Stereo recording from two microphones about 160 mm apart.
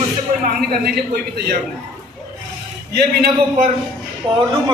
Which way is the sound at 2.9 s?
80° right.